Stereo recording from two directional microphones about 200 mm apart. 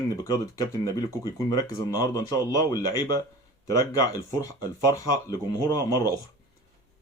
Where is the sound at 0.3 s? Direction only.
20° left (ahead or behind).